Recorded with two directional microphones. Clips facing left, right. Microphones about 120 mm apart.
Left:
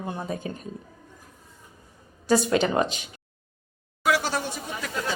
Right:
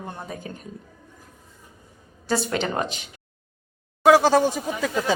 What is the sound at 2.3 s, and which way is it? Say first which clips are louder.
Speech: left 3 dB; 20° left (ahead or behind).